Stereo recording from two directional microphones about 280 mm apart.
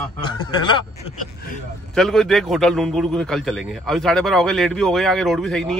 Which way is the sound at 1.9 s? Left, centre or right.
Centre.